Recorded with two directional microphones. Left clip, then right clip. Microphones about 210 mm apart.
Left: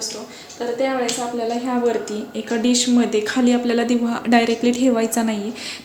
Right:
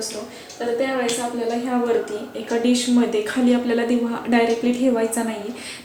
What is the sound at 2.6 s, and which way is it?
Speech, 55° left (ahead or behind).